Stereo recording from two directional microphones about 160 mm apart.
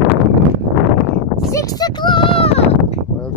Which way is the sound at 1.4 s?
20° left (ahead or behind).